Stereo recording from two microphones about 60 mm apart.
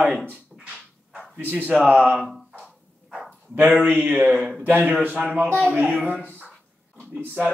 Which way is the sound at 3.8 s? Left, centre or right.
Centre.